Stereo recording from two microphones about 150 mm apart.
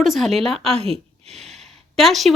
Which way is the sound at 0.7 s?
40° right (ahead or behind).